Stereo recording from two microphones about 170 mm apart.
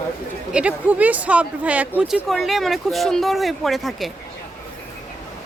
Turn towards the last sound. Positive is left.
turn(degrees=0)  # may be behind; listen again after turning